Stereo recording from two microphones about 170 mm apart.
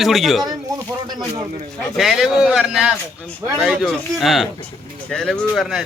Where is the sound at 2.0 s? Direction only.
Centre (ahead or behind).